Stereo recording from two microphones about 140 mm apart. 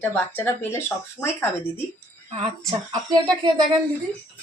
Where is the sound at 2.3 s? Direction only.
45° right (ahead or behind).